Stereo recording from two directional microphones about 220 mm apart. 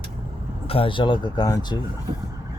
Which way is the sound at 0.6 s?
25° left (ahead or behind).